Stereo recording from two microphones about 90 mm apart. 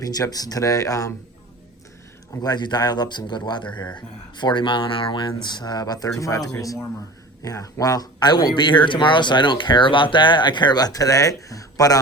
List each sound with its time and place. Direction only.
0.0 s speech: 45° left (ahead or behind)
2.4 s speech: 50° left (ahead or behind); by 5.3 s 70° left (ahead or behind)
5.4 s a man's voice: 55° left (ahead or behind)